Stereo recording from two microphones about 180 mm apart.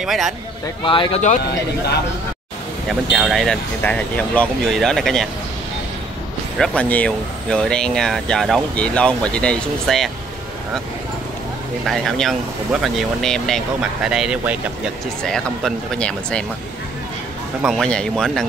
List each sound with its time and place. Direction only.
0.0 s speech: centre (ahead or behind)
0.8 s speech: 30° left (ahead or behind)
2.9 s speech: centre (ahead or behind)
6.6 s speech: 5° left (ahead or behind)
11.8 s speech: centre (ahead or behind)
15.2 s speech: 5° left (ahead or behind)
17.6 s speech: centre (ahead or behind)